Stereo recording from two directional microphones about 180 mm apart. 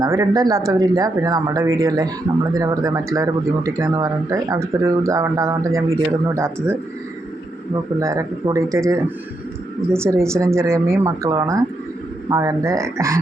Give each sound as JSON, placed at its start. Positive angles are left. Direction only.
{"t": 0.0, "sound": "speech", "side_deg": -20}
{"t": 7.9, "sound": "speech", "side_deg": -20}